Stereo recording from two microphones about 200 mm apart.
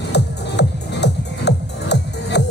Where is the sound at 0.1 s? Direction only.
60° left (ahead or behind).